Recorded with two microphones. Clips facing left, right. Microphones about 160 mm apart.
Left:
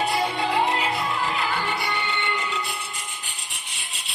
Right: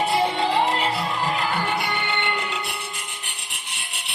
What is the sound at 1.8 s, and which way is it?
Music, 65° right (ahead or behind).